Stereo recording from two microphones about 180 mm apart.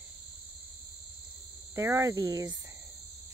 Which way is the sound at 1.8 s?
15° right (ahead or behind).